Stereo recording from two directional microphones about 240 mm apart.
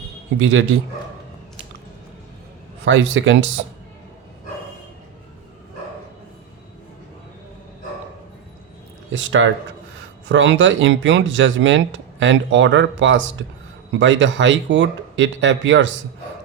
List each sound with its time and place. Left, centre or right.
0.3 s speech: right
2.8 s speech: right
9.1 s speech: right